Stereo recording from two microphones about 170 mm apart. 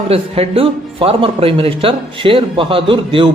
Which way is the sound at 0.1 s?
35° right (ahead or behind).